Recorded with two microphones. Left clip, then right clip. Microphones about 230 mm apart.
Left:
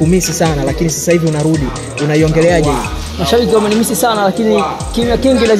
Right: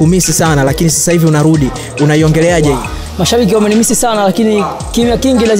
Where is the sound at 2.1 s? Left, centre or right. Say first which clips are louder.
Even; right.